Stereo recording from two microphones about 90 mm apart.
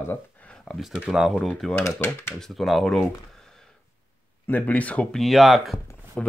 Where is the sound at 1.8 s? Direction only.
30° left (ahead or behind).